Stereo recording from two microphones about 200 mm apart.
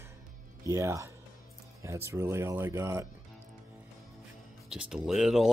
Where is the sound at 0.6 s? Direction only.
15° right (ahead or behind).